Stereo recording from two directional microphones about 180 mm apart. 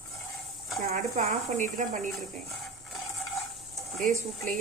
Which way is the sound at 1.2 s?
40° right (ahead or behind).